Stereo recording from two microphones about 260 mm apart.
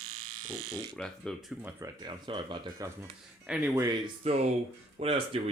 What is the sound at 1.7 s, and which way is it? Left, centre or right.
Speech, centre.